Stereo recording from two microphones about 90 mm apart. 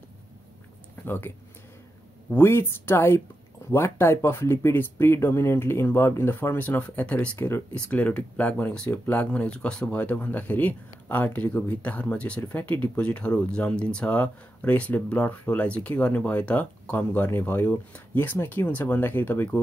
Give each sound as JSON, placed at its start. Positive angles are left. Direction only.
{"t": 1.0, "sound": "speech", "side_deg": 25}
{"t": 2.3, "sound": "speech", "side_deg": 25}
{"t": 7.3, "sound": "speech", "side_deg": 30}
{"t": 7.7, "sound": "speech", "side_deg": 15}